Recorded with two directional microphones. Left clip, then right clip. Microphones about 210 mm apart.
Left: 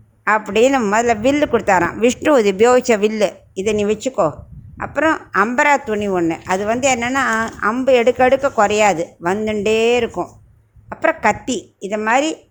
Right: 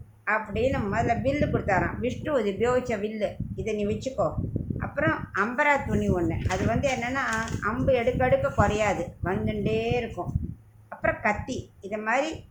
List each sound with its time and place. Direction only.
0.3 s speech: 55° left (ahead or behind)